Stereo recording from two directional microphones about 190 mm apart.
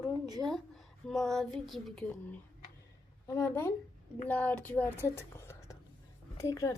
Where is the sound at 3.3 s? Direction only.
15° left (ahead or behind).